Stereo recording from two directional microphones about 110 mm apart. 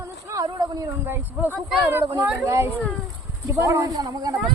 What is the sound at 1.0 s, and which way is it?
Speech, 20° right (ahead or behind).